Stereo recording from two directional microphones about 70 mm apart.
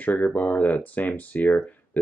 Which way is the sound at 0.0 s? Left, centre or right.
Left.